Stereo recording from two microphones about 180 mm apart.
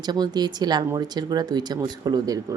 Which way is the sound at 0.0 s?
25° right (ahead or behind).